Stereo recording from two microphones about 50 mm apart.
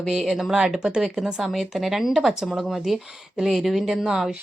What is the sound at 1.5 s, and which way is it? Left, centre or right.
A woman's voice, centre.